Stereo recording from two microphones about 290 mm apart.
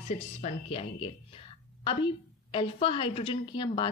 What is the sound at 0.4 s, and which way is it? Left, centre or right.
Speech, centre.